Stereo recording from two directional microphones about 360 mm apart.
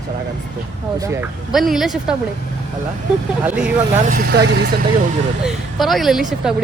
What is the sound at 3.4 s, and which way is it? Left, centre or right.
Speech, centre.